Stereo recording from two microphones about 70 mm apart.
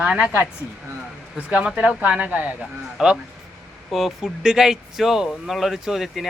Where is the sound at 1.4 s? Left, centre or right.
Centre.